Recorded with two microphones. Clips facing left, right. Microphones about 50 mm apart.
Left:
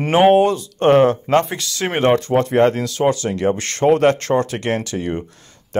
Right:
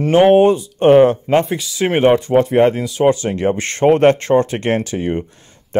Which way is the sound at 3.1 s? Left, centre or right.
Right.